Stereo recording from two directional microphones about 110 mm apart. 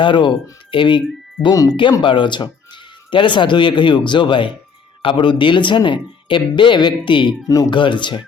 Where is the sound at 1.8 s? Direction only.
50° left (ahead or behind).